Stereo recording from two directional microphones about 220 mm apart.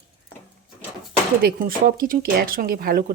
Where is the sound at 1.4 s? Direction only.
40° right (ahead or behind).